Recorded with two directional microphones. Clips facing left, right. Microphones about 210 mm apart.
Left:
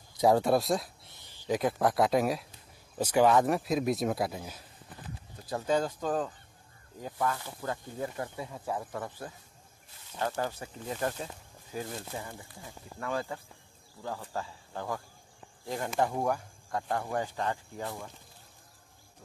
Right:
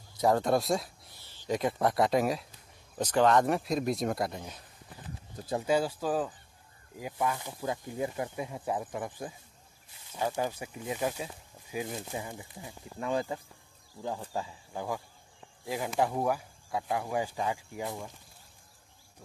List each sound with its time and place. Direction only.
0.2 s speech: 10° left (ahead or behind)
1.2 s a sound: 15° left (ahead or behind)
1.5 s speech: centre (ahead or behind)
5.7 s speech: 10° right (ahead or behind)